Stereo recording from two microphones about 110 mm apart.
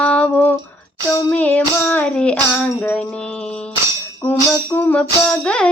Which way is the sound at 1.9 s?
10° left (ahead or behind).